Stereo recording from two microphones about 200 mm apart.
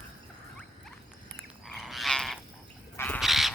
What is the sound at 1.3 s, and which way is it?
Frog, centre (ahead or behind).